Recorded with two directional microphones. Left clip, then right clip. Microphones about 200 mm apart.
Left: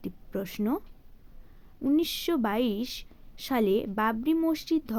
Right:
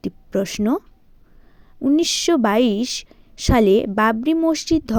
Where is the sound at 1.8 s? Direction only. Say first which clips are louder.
Right 9 dB; 35° right (ahead or behind).